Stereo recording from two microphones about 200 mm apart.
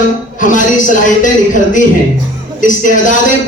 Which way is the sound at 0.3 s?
40° left (ahead or behind).